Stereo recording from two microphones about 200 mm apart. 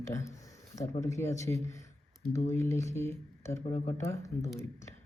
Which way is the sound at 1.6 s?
15° left (ahead or behind).